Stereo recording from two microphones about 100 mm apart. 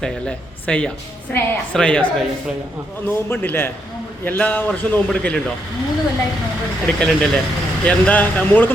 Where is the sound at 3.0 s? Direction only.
20° left (ahead or behind).